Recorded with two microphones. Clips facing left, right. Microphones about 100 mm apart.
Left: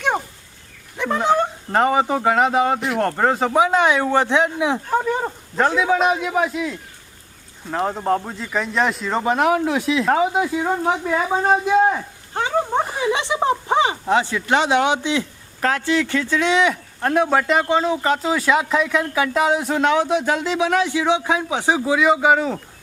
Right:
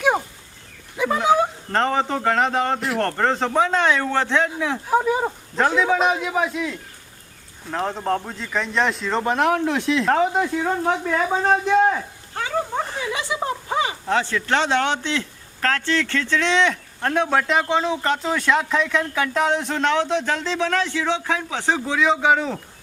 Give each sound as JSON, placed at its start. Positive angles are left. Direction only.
{"t": 0.9, "sound": "speech", "side_deg": -5}
{"t": 1.7, "sound": "speech", "side_deg": 10}
{"t": 4.9, "sound": "speech", "side_deg": -5}
{"t": 12.3, "sound": "a sound", "side_deg": 30}
{"t": 14.1, "sound": "speech", "side_deg": 15}